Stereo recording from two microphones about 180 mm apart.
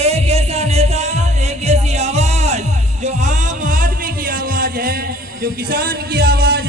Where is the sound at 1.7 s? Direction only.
35° right (ahead or behind).